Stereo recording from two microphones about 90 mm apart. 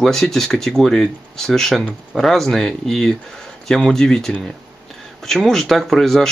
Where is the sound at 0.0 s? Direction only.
5° left (ahead or behind).